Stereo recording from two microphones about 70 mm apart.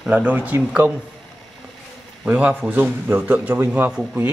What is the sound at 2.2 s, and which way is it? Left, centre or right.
Speech, right.